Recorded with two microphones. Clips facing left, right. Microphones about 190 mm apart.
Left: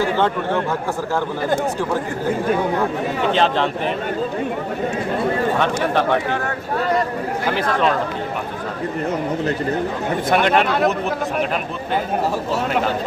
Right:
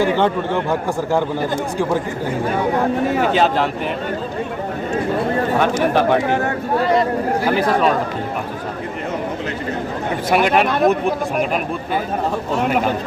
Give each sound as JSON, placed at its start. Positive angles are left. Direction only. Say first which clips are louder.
{"t": 0.2, "sound": "speech", "louder": "right 1 dB", "side_deg": -15}
{"t": 3.3, "sound": "speech", "louder": "right 1 dB", "side_deg": -10}
{"t": 5.5, "sound": "speech", "louder": "right 3 dB", "side_deg": -10}
{"t": 7.4, "sound": "speech", "louder": "right 2 dB", "side_deg": -5}
{"t": 10.2, "sound": "speech", "louder": "right 1 dB", "side_deg": -5}